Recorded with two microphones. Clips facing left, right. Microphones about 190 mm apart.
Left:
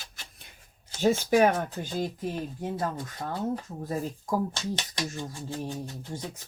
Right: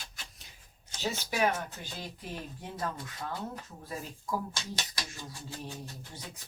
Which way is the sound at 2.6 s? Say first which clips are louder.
Left 6 dB; 35° left (ahead or behind).